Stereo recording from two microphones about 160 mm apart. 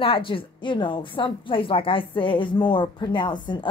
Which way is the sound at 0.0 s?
35° left (ahead or behind).